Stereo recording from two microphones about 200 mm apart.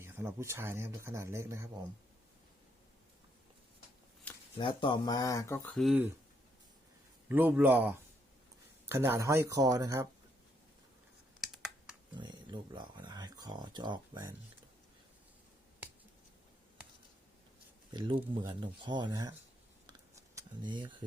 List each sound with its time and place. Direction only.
0.0 s speech: 10° right (ahead or behind)
4.3 s a sound: 5° left (ahead or behind)
4.8 s speech: 20° left (ahead or behind); by 6.1 s centre (ahead or behind)
7.3 s speech: 10° right (ahead or behind)
11.3 s computer keyboard: centre (ahead or behind)
12.1 s speech: 20° right (ahead or behind)
17.9 s speech: 20° right (ahead or behind)
19.9 s a sound: 20° right (ahead or behind)